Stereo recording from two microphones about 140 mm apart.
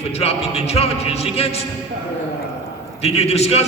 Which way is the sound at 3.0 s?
50° left (ahead or behind).